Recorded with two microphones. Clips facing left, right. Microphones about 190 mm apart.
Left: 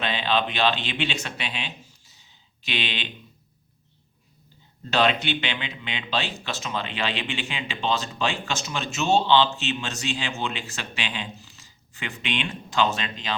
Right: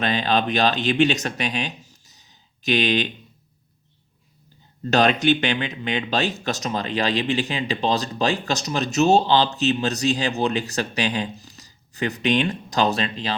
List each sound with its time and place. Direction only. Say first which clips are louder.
0.0 s speech: right 4 dB; 45° right (ahead or behind)
4.9 s speech: right 5 dB; 45° right (ahead or behind)